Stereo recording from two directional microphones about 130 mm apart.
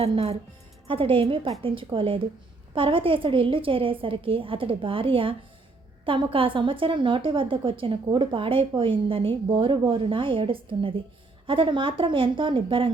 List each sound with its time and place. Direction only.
0.0 s a woman's voice: 50° right (ahead or behind)